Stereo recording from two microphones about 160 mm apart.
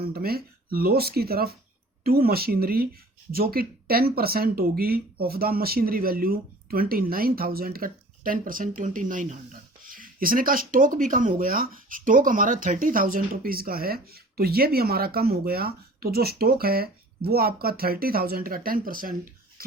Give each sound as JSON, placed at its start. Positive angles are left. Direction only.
{"t": 0.1, "sound": "speech", "side_deg": -75}